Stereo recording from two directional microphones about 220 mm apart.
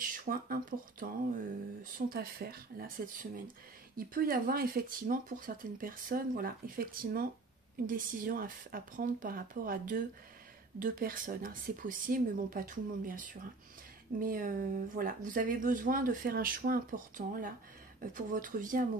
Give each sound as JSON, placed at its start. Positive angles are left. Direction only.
{"t": 0.0, "sound": "speech", "side_deg": -40}